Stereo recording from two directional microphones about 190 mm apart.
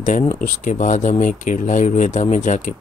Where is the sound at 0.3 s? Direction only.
40° left (ahead or behind).